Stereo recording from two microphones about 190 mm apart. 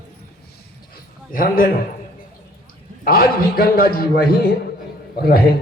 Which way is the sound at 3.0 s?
50° left (ahead or behind).